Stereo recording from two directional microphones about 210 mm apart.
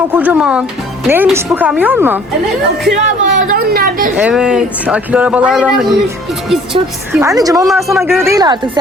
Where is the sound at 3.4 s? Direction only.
45° right (ahead or behind).